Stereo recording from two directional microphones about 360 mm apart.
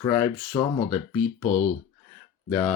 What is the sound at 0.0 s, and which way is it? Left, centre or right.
Speech, centre.